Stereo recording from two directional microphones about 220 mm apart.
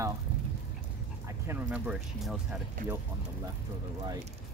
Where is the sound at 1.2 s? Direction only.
10° right (ahead or behind).